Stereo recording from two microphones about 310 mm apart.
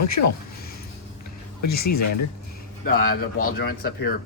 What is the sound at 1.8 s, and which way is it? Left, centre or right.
Speech, left.